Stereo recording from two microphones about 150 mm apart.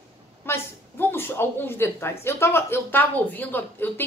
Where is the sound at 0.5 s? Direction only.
15° left (ahead or behind).